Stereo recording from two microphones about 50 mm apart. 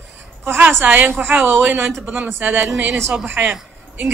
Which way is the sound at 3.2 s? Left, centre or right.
Right.